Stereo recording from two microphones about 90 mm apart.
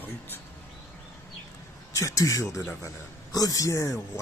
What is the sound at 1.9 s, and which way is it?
Speech, 40° left (ahead or behind).